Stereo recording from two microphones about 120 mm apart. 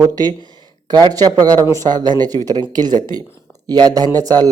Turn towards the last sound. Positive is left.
turn(degrees=-30)  # may be behind; listen again after turning